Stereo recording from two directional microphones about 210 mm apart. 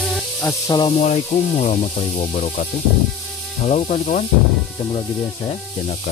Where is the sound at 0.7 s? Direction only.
25° left (ahead or behind).